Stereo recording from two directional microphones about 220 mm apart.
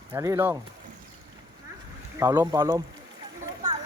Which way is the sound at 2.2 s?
10° right (ahead or behind).